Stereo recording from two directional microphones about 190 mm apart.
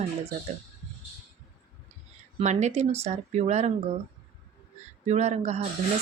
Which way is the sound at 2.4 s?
40° right (ahead or behind).